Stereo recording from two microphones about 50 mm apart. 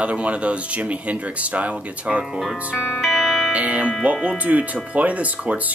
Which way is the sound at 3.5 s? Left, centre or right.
Right.